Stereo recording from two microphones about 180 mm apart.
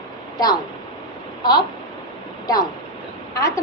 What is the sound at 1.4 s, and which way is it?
Speech, 25° left (ahead or behind).